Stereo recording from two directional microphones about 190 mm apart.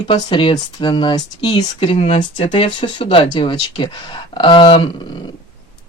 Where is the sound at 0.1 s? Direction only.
25° left (ahead or behind).